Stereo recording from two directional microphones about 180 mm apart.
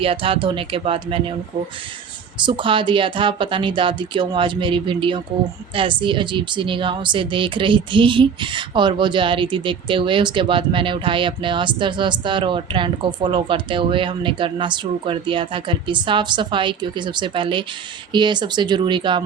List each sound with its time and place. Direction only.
0.0 s speech: 30° right (ahead or behind)
2.4 s speech: 25° right (ahead or behind)